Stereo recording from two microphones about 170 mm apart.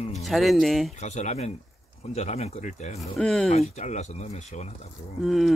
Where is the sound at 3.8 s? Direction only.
45° left (ahead or behind).